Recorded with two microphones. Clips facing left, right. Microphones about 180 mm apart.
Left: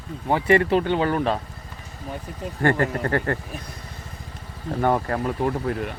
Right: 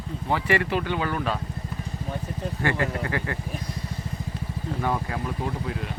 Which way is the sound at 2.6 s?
50° left (ahead or behind).